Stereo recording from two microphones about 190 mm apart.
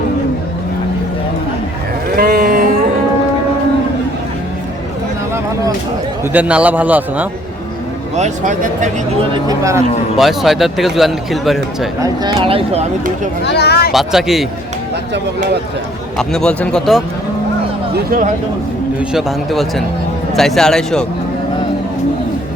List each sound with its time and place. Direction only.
2.1 s a sound: 50° right (ahead or behind)
6.3 s a man's voice: 5° right (ahead or behind)
8.1 s speech: 40° right (ahead or behind)
9.5 s a man's voice: 15° right (ahead or behind)
10.2 s a man's voice: centre (ahead or behind)
12.0 s speech: 20° right (ahead or behind)
13.4 s speech: 60° left (ahead or behind)
13.9 s a man's voice: centre (ahead or behind)
16.1 s a man's voice: 5° left (ahead or behind)
17.9 s speech: 50° right (ahead or behind)
18.9 s a man's voice: centre (ahead or behind)